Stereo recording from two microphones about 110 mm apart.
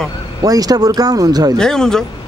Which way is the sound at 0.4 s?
35° right (ahead or behind).